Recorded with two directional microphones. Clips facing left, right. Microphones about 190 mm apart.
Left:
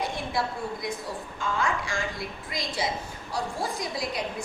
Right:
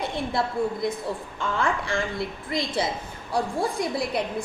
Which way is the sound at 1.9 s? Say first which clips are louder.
Right 5 dB; 60° right (ahead or behind).